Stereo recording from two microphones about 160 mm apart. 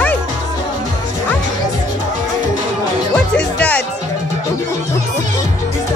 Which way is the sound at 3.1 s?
5° left (ahead or behind).